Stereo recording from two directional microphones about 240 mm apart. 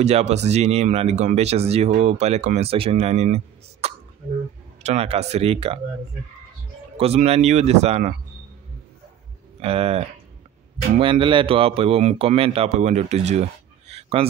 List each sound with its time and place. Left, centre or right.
0.0 s speech: right
7.0 s speech: right
9.6 s speech: right